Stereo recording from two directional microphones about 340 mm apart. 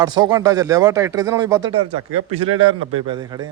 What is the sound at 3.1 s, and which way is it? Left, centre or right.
Speech, centre.